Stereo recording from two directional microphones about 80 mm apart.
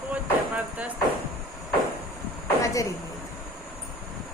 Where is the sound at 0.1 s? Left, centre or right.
Centre.